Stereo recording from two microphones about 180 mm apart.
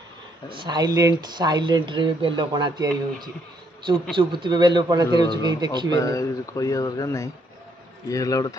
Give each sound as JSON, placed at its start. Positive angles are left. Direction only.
{"t": 0.5, "sound": "speech", "side_deg": -25}
{"t": 4.2, "sound": "speech", "side_deg": -25}
{"t": 5.9, "sound": "speech", "side_deg": 20}